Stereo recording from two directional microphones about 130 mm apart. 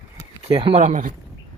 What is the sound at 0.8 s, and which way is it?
Speech, 75° right (ahead or behind).